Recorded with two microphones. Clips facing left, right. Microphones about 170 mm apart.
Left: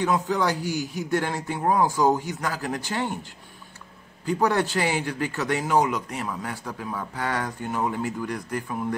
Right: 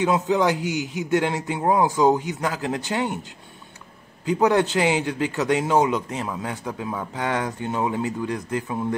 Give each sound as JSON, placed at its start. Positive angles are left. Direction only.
{"t": 0.0, "sound": "speech", "side_deg": -20}
{"t": 4.3, "sound": "speech", "side_deg": -20}